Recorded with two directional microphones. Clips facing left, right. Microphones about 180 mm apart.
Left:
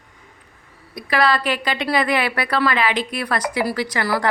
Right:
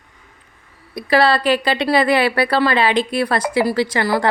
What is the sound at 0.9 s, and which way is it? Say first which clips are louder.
A woman's voice: right 4 dB; 30° right (ahead or behind).